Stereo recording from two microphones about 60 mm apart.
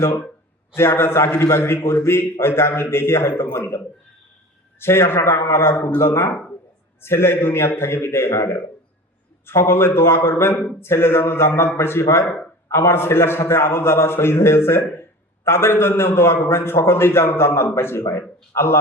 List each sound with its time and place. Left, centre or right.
0.8 s a man's voice: left
4.8 s a man's voice: left